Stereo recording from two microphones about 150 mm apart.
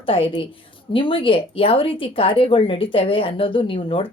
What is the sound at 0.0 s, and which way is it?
Speech, 35° left (ahead or behind).